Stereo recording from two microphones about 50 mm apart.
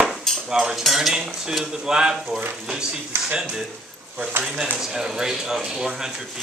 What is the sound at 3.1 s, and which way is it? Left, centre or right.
Speech, right.